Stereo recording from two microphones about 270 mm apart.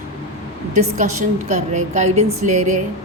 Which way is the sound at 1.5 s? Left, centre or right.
Right.